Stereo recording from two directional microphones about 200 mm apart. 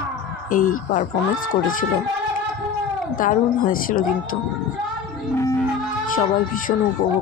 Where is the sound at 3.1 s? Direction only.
45° left (ahead or behind).